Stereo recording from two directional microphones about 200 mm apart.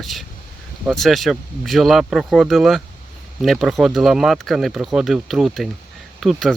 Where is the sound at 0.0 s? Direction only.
Centre (ahead or behind).